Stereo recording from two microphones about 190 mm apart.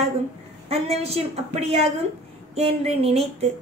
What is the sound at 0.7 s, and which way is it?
A woman's voice, 35° right (ahead or behind).